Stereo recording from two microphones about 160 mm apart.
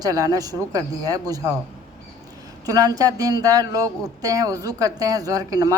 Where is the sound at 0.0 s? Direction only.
25° right (ahead or behind).